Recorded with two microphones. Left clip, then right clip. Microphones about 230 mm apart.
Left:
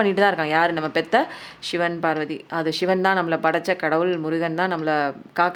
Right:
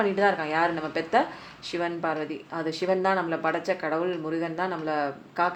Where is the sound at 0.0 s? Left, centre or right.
Left.